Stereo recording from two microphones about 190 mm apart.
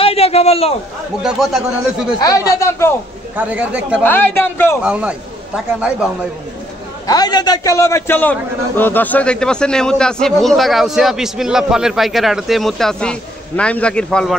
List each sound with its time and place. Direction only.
0.0 s a sound: 30° left (ahead or behind)
1.2 s a man's voice: centre (ahead or behind)
2.1 s speech: 20° left (ahead or behind)
3.3 s speech: 5° right (ahead or behind)
4.0 s speech: 10° left (ahead or behind)
4.8 s a man's voice: 5° right (ahead or behind)
7.1 s a man's voice: 20° left (ahead or behind); by 14.3 s 5° left (ahead or behind)